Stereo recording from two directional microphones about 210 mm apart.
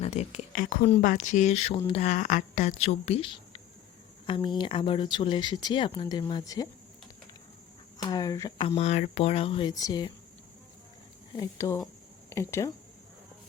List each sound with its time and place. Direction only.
0.0 s speech: 30° left (ahead or behind)
7.9 s speech: 20° left (ahead or behind)
11.3 s speech: 15° left (ahead or behind)